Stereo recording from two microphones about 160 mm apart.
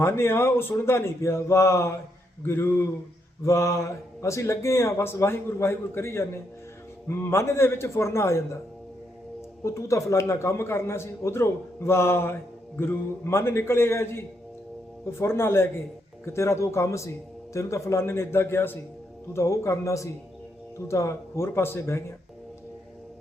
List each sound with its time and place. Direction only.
0.0 s a man's voice: 15° left (ahead or behind)
9.6 s a man's voice: 20° left (ahead or behind)